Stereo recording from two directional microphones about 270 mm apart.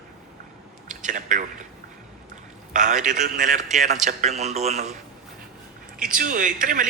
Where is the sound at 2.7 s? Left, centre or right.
Right.